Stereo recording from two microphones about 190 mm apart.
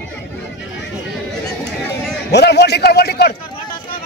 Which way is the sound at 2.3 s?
60° left (ahead or behind).